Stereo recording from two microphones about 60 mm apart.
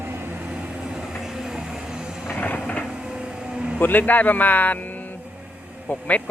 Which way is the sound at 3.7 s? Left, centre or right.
Left.